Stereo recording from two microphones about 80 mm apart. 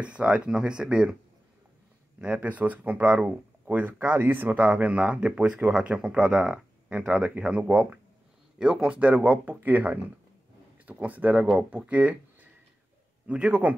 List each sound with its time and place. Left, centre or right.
0.0 s speech: centre
2.1 s speech: centre